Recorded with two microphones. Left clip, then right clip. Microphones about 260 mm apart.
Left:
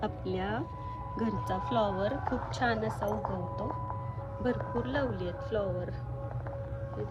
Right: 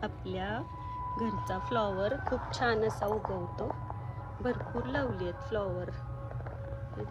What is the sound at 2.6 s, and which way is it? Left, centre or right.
Speech, right.